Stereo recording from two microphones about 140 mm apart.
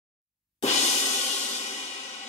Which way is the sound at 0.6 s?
55° left (ahead or behind).